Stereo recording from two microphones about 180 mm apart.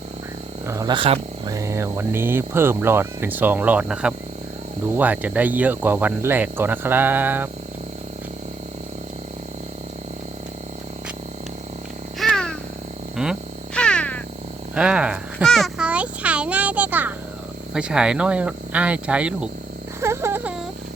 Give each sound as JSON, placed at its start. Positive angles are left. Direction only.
{"t": 0.7, "sound": "speech", "side_deg": -20}
{"t": 1.5, "sound": "speech", "side_deg": -15}
{"t": 12.2, "sound": "babbling", "side_deg": 5}
{"t": 13.2, "sound": "cat", "side_deg": 0}
{"t": 14.8, "sound": "a sound", "side_deg": -5}
{"t": 17.7, "sound": "speech", "side_deg": -5}
{"t": 20.0, "sound": "a sound", "side_deg": -15}